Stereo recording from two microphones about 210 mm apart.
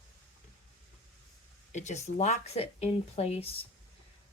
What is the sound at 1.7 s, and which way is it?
Speech, 35° left (ahead or behind).